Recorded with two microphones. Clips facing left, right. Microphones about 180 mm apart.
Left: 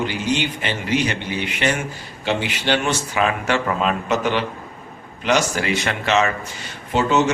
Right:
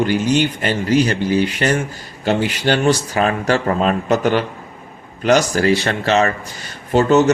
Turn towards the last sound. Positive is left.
turn(degrees=-40)  # may be behind; listen again after turning